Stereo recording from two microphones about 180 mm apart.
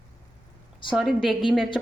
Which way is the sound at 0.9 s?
Centre (ahead or behind).